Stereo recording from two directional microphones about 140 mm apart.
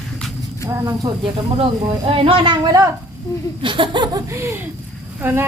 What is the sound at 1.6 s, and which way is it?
Speech, 40° right (ahead or behind).